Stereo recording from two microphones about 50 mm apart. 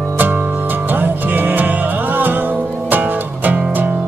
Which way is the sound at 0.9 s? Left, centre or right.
Right.